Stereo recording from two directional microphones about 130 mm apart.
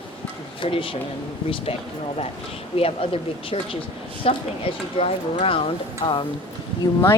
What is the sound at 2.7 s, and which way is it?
Speech, 45° left (ahead or behind).